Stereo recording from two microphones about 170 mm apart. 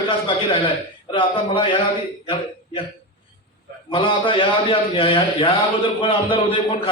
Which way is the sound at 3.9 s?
30° left (ahead or behind).